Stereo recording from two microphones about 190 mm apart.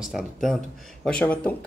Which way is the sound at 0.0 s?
Centre (ahead or behind).